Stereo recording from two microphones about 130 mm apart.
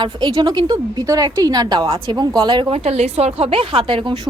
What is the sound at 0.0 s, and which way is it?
A woman's voice, 35° right (ahead or behind).